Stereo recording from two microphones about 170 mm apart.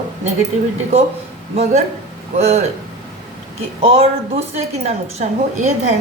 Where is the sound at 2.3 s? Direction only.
40° right (ahead or behind).